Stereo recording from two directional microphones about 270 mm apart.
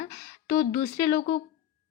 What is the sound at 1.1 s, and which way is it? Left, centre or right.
Speech, left.